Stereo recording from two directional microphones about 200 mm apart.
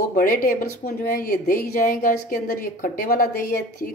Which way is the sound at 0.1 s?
45° left (ahead or behind).